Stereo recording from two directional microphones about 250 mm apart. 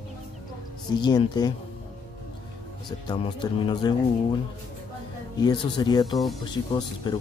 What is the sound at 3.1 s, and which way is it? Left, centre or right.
Speech, centre.